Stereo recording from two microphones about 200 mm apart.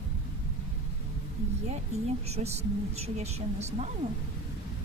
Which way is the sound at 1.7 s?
30° right (ahead or behind).